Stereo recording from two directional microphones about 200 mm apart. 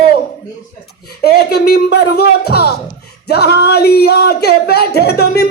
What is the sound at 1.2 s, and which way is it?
Speech, 50° left (ahead or behind).